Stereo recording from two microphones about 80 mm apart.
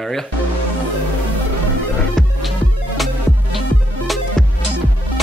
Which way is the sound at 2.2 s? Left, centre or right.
Centre.